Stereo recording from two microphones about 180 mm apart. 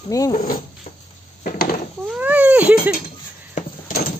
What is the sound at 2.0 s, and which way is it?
Cat, 10° right (ahead or behind).